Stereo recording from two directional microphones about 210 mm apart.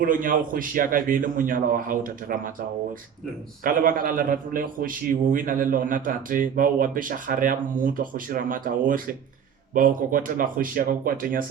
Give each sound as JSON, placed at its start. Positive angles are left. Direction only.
{"t": 0.0, "sound": "a man's voice", "side_deg": -40}
{"t": 3.6, "sound": "a man's voice", "side_deg": -40}